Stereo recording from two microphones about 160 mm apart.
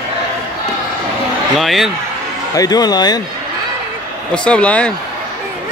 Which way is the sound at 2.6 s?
25° left (ahead or behind).